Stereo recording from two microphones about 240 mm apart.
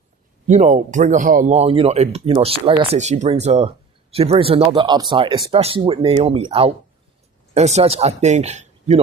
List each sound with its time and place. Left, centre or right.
0.4 s speech: right